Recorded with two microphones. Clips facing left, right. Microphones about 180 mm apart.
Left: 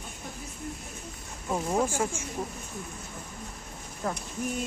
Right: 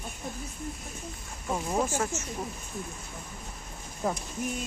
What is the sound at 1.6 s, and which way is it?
Speech, 10° left (ahead or behind).